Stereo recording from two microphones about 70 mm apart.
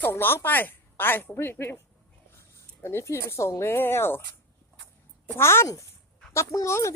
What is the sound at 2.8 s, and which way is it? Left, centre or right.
A woman's voice, left.